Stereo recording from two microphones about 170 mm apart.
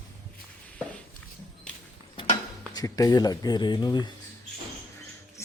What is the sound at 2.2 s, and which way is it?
Speech, 25° left (ahead or behind).